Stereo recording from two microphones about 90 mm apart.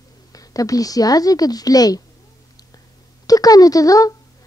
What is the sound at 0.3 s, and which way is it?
Speech, 40° left (ahead or behind).